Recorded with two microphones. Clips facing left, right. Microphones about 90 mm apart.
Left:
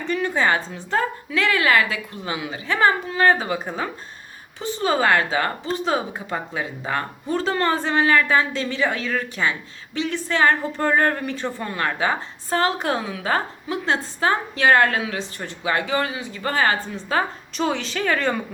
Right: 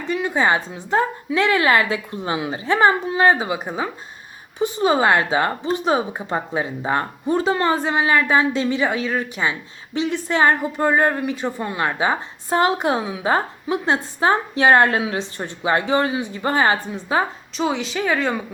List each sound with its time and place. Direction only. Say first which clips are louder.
0.1 s a woman's voice: right 2 dB; 10° right (ahead or behind)
17.6 s speech: right 1 dB; 5° right (ahead or behind)